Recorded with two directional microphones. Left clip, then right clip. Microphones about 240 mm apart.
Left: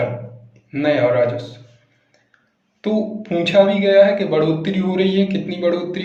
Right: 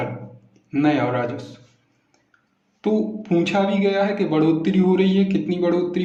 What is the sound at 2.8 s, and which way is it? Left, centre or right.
Speech, right.